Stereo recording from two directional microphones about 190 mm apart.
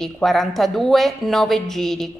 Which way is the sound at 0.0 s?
Centre (ahead or behind).